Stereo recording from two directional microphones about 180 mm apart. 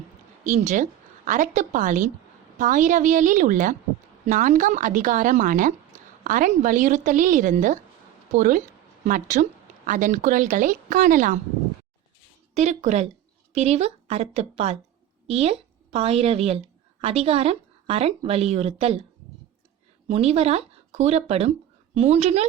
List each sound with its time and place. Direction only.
0.4 s a woman's voice: 40° right (ahead or behind)
12.5 s a woman's voice: 40° right (ahead or behind)
20.1 s speech: 35° right (ahead or behind)